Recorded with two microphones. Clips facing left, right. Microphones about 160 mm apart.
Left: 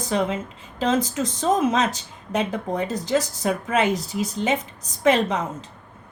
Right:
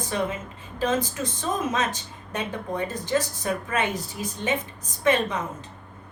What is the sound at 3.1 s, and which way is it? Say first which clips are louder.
A woman's voice: left 3 dB; 90° left.